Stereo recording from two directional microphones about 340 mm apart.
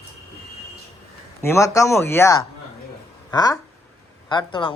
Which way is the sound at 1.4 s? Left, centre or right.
Centre.